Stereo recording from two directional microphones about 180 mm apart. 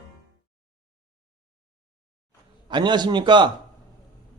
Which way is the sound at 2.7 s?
25° right (ahead or behind).